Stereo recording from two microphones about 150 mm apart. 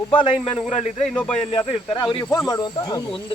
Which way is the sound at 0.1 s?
35° left (ahead or behind).